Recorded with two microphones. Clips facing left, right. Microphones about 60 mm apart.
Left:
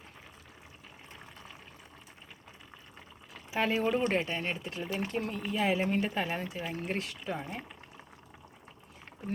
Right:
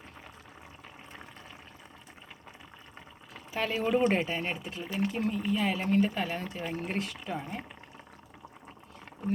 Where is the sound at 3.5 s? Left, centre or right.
Centre.